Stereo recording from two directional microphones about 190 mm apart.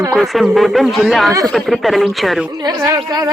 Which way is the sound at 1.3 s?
20° right (ahead or behind).